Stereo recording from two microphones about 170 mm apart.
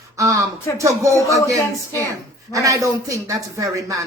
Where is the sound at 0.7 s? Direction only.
20° right (ahead or behind).